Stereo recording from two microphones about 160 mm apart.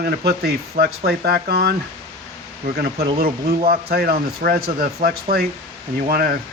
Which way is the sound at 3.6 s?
70° right (ahead or behind).